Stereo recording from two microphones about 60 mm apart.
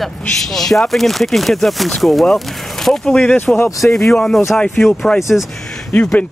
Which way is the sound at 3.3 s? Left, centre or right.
Left.